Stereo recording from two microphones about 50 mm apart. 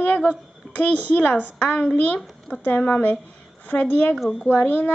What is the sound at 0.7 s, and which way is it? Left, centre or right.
A child's voice, left.